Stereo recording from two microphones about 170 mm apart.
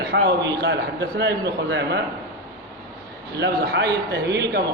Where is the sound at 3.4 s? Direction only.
90° right.